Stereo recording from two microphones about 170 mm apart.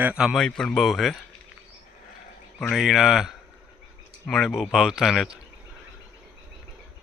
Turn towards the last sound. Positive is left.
turn(degrees=0)  # may be behind; listen again after turning